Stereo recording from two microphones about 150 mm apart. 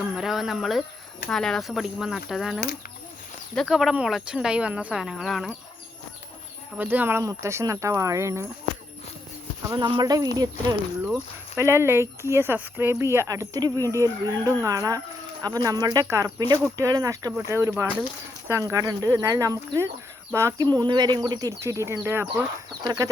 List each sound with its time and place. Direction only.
0.0 s speech: 5° right (ahead or behind)
6.7 s speech: 10° right (ahead or behind)
9.6 s speech: 30° right (ahead or behind)
20.7 s speech: 30° right (ahead or behind)